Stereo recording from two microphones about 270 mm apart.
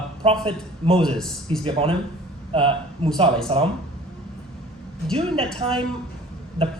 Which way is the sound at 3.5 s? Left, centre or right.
Right.